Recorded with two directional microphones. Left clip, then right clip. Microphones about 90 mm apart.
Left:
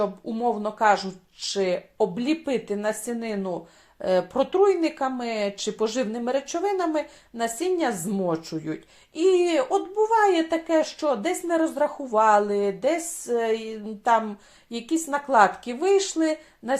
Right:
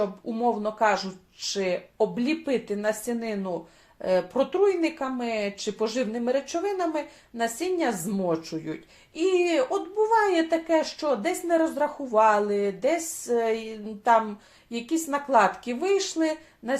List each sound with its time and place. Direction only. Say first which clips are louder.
0.3 s speech: even; 35° left (ahead or behind)